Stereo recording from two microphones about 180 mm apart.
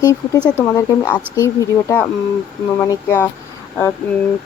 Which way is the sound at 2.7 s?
15° left (ahead or behind).